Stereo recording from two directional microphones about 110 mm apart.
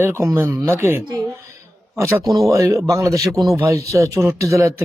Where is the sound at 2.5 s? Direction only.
25° right (ahead or behind).